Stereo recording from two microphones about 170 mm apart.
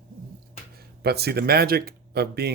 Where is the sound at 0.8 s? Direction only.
70° right (ahead or behind).